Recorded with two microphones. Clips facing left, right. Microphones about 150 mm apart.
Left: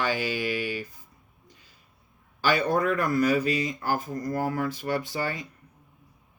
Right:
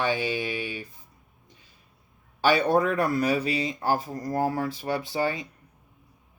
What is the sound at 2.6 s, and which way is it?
Speech, 30° right (ahead or behind).